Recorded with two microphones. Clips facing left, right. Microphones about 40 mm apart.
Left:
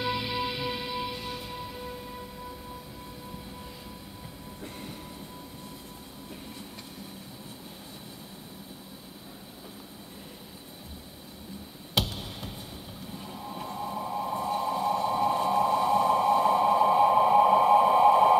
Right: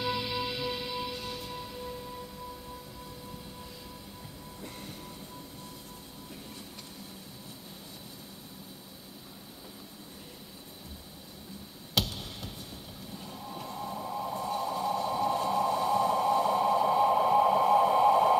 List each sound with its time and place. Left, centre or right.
0.0 s music: centre
11.9 s music: centre
13.2 s a sound: centre